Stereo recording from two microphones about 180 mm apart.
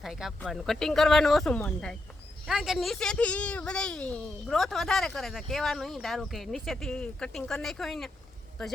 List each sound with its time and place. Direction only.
0.0 s speech: centre (ahead or behind)